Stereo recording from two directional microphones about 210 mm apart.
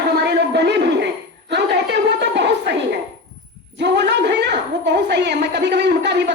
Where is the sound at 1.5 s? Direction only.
55° right (ahead or behind).